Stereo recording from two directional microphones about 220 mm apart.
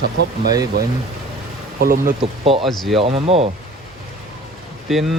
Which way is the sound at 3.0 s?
30° right (ahead or behind).